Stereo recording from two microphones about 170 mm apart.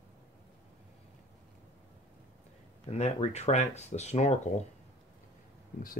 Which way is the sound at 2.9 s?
40° left (ahead or behind).